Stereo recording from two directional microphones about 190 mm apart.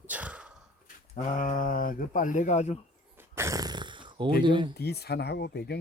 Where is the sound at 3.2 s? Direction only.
15° right (ahead or behind).